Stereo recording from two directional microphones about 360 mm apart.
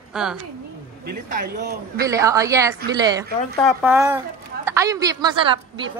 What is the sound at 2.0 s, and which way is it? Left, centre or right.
A woman's voice, centre.